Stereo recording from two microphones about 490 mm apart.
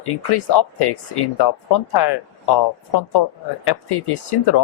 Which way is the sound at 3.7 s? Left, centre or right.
Left.